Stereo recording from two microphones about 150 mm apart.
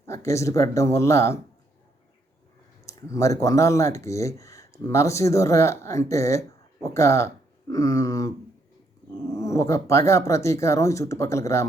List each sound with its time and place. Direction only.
0.0 s speech: 20° left (ahead or behind)
2.8 s speech: 20° left (ahead or behind)
9.3 s speech: 20° left (ahead or behind)